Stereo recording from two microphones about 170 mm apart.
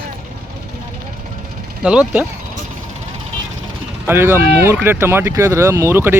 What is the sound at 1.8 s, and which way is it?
Speech, 5° right (ahead or behind).